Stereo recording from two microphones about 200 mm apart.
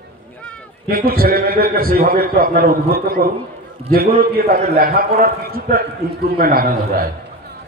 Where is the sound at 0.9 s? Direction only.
45° right (ahead or behind).